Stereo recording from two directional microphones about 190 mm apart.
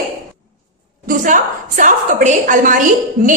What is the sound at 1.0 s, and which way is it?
A woman's voice, 45° right (ahead or behind).